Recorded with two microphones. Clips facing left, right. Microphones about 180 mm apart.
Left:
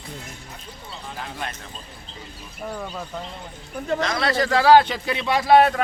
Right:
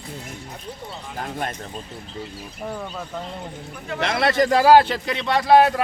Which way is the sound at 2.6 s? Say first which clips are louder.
Even; centre (ahead or behind).